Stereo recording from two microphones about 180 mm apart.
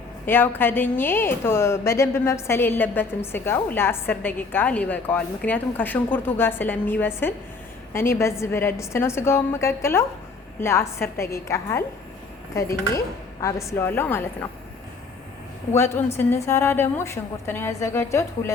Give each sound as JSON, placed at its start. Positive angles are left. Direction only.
{"t": 0.3, "sound": "a woman's voice", "side_deg": 10}
{"t": 13.4, "sound": "a woman's voice", "side_deg": 15}
{"t": 15.7, "sound": "a woman's voice", "side_deg": 15}